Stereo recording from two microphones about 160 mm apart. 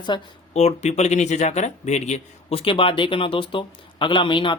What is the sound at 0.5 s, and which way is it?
A man's voice, 45° left (ahead or behind).